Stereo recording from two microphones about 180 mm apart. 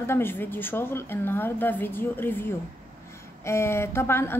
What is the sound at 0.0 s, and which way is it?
A woman's voice, 15° left (ahead or behind).